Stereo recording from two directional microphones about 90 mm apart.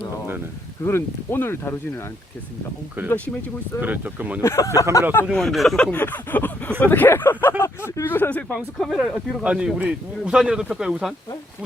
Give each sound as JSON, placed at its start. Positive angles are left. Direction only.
{"t": 0.9, "sound": "speech", "side_deg": 25}
{"t": 3.8, "sound": "speech", "side_deg": -20}
{"t": 4.4, "sound": "speech", "side_deg": 35}
{"t": 5.3, "sound": "speech", "side_deg": 5}
{"t": 8.5, "sound": "speech", "side_deg": 0}
{"t": 9.4, "sound": "speech", "side_deg": -10}